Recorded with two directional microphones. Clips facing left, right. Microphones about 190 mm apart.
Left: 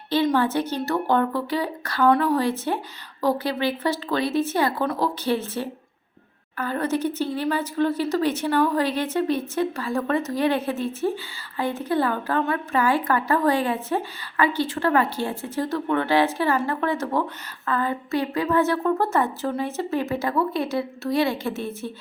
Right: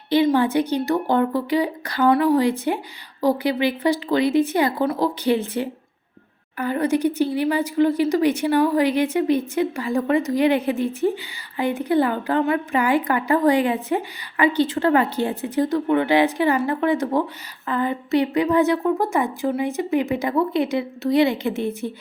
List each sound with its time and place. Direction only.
0.3 s speech: 15° right (ahead or behind)